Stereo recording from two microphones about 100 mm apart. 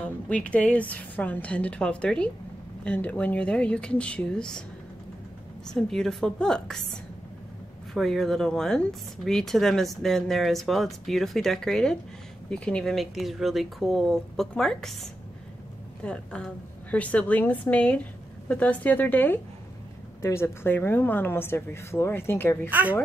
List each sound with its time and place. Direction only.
0.0 s a woman's voice: 10° left (ahead or behind)
5.7 s a woman's voice: 5° left (ahead or behind)
7.9 s speech: 5° left (ahead or behind)
16.0 s a woman's voice: 10° left (ahead or behind)
22.7 s a woman's voice: 15° right (ahead or behind)